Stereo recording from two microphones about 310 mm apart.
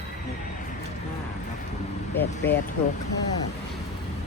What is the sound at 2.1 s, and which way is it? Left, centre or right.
Speech, centre.